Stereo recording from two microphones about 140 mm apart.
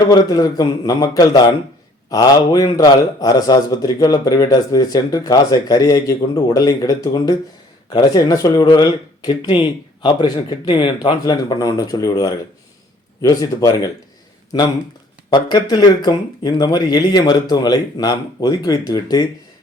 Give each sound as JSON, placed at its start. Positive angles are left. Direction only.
{"t": 0.1, "sound": "a man's voice", "side_deg": 25}